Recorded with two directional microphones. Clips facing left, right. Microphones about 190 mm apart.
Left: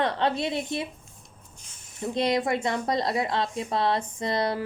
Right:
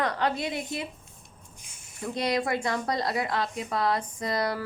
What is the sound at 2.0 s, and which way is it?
A woman's voice, 25° left (ahead or behind).